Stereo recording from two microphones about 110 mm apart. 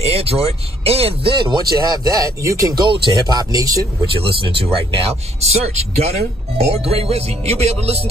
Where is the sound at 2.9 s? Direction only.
40° right (ahead or behind).